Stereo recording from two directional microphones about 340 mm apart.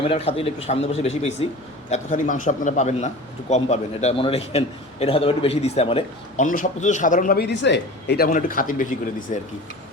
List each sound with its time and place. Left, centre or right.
0.1 s a man's voice: centre